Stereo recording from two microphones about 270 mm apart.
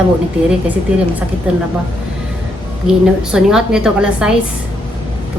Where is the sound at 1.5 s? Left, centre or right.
Centre.